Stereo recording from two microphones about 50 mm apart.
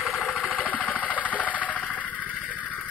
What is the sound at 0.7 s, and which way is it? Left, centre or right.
Engine, left.